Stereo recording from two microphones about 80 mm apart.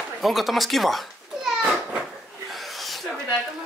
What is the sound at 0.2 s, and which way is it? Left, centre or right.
A child's voice, centre.